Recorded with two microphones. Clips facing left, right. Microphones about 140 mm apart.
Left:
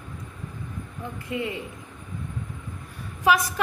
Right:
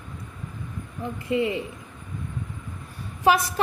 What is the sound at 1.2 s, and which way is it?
Speech, 20° right (ahead or behind).